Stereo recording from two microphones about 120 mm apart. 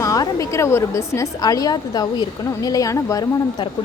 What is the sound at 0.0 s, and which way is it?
A woman's voice, 30° left (ahead or behind).